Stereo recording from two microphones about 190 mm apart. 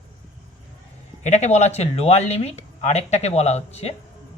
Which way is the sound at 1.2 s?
35° left (ahead or behind).